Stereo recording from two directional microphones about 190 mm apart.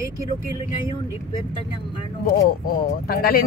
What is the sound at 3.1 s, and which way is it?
Speech, 50° left (ahead or behind).